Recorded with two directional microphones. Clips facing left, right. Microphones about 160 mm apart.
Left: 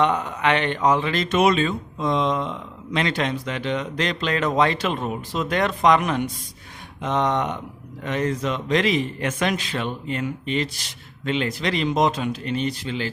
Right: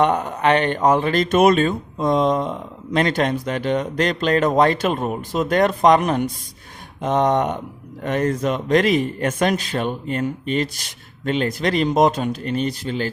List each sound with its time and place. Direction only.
0.0 s speech: 45° right (ahead or behind)